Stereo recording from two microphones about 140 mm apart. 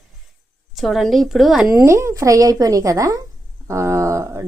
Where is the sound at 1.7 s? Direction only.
20° right (ahead or behind).